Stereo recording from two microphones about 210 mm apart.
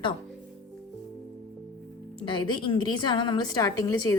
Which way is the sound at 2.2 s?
20° left (ahead or behind).